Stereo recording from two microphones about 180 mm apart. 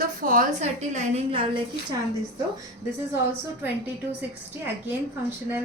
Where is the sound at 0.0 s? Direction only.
50° right (ahead or behind); by 1.6 s 30° right (ahead or behind).